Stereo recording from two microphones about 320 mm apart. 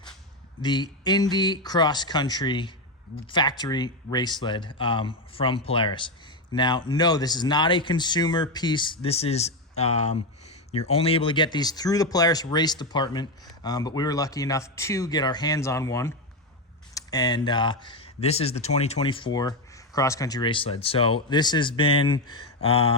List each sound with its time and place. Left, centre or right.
0.6 s speech: centre